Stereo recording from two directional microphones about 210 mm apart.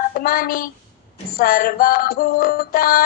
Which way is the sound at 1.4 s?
45° left (ahead or behind).